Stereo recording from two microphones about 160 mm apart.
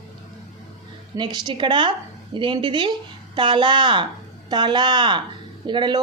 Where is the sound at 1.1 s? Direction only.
25° right (ahead or behind).